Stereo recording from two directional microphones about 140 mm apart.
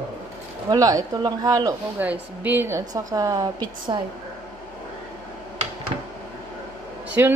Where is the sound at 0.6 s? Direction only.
25° right (ahead or behind).